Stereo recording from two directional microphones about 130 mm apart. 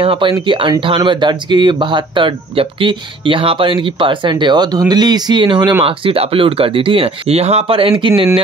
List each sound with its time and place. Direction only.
0.0 s speech: 40° right (ahead or behind)
5.9 s speech: 45° right (ahead or behind)